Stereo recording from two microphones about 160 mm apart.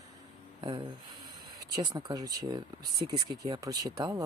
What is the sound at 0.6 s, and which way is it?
Speech, 25° right (ahead or behind).